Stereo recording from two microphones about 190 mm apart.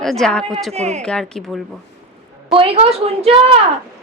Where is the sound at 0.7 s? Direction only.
35° right (ahead or behind).